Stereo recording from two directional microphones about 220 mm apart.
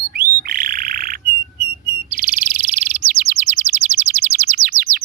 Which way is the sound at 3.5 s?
30° right (ahead or behind).